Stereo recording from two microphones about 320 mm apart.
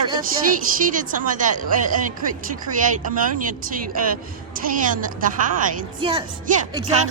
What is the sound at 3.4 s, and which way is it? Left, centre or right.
Speech, right.